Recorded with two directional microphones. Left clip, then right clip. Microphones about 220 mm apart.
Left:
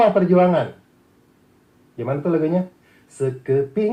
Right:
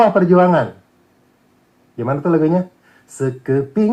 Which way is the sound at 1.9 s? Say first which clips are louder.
Right 4 dB; 40° right (ahead or behind).